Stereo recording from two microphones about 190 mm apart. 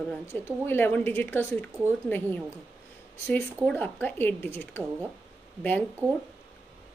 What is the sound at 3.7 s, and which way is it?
A woman's voice, 10° left (ahead or behind).